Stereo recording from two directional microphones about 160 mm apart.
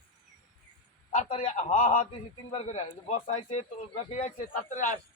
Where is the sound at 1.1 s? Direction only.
40° left (ahead or behind).